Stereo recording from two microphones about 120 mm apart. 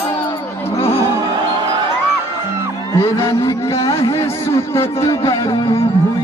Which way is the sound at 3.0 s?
25° left (ahead or behind).